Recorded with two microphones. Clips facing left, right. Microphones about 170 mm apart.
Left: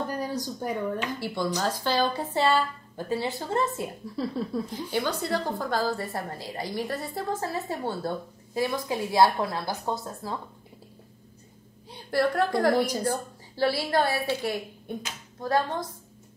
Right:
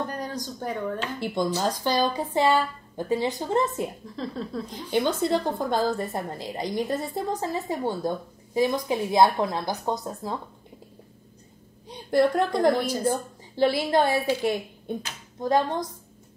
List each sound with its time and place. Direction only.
0.1 s a sound: 10° left (ahead or behind)
0.6 s speech: 10° left (ahead or behind)
1.2 s a woman's voice: 20° right (ahead or behind)
4.2 s speech: 10° left (ahead or behind)
4.9 s a woman's voice: 20° right (ahead or behind)
11.9 s a woman's voice: 20° right (ahead or behind)